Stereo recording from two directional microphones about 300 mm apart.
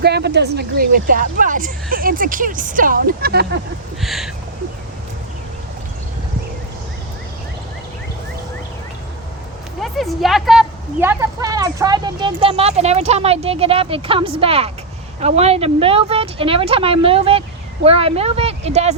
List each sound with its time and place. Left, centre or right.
0.0 s a woman's voice: right
4.0 s a sound: centre
9.8 s a woman's voice: centre; by 18.9 s right